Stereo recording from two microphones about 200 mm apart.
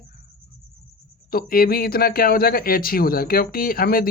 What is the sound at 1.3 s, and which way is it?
A man's voice, 45° left (ahead or behind).